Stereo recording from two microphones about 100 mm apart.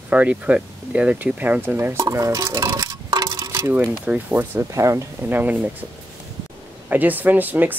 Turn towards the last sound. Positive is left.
turn(degrees=-20)  # may be behind; listen again after turning